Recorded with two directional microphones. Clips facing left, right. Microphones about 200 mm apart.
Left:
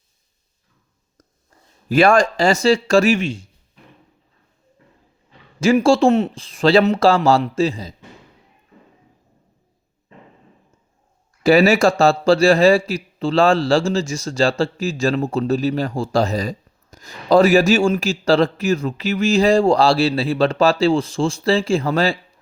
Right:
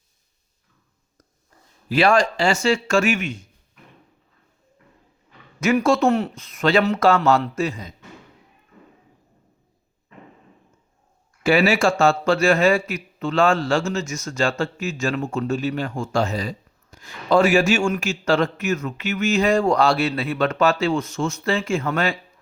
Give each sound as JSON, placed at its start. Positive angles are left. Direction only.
{"t": 1.9, "sound": "a man's voice", "side_deg": 45}
{"t": 5.5, "sound": "speech", "side_deg": 30}
{"t": 11.4, "sound": "a man's voice", "side_deg": 40}